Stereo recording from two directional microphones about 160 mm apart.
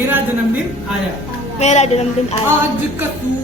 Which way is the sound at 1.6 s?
45° left (ahead or behind).